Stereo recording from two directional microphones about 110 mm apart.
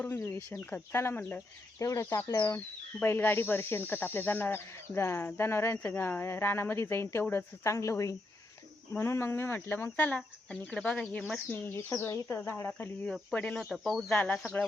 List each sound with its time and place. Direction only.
0.0 s speech: 20° left (ahead or behind)
11.5 s speech: 20° left (ahead or behind)
13.3 s speech: 10° left (ahead or behind)